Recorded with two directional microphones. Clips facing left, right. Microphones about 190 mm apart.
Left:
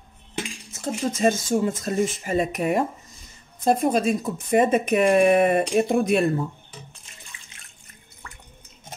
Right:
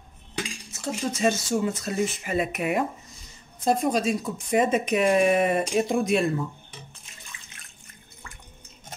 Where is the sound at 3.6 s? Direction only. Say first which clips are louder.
Left 3 dB; 50° left (ahead or behind).